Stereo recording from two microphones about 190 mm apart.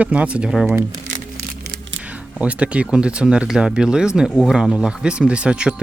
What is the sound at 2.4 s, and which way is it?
Speech, 5° right (ahead or behind).